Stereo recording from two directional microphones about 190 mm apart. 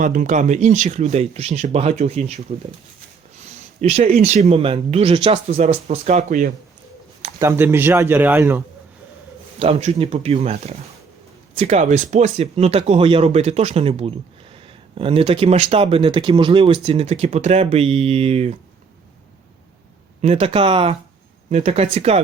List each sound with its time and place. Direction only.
0.0 s speech: 45° right (ahead or behind)
3.3 s a sound: 35° right (ahead or behind)
4.3 s speech: 35° right (ahead or behind)
7.3 s speech: 15° right (ahead or behind)
9.6 s speech: 30° right (ahead or behind)
20.2 s speech: 35° right (ahead or behind)